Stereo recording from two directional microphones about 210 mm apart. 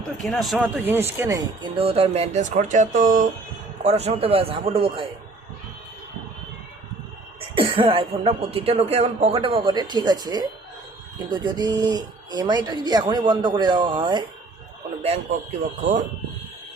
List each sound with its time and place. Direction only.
0.3 s speech: centre (ahead or behind); by 5.0 s 25° right (ahead or behind)
7.5 s speech: 25° right (ahead or behind)
15.8 s speech: 35° right (ahead or behind)